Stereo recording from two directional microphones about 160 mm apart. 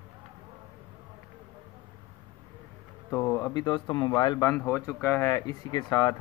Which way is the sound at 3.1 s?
20° left (ahead or behind).